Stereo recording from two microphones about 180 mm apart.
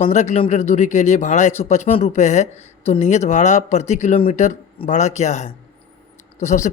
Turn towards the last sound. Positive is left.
turn(degrees=40)  # may be behind; listen again after turning